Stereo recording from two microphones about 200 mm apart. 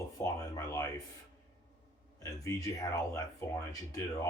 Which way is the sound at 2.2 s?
15° left (ahead or behind).